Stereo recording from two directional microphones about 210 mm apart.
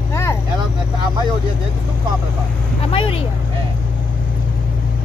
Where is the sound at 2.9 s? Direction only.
25° left (ahead or behind).